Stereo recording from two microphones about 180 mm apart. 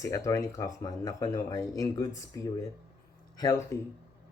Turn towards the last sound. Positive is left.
turn(degrees=20)  # may be behind; listen again after turning